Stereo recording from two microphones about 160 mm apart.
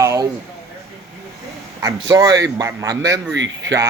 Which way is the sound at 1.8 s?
20° right (ahead or behind).